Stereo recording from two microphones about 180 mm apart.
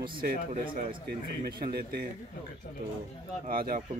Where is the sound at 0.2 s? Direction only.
50° right (ahead or behind).